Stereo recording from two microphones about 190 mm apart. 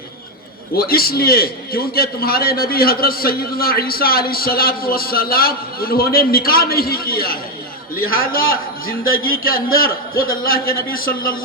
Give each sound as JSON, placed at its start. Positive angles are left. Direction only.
{"t": 0.8, "sound": "a man's voice", "side_deg": 50}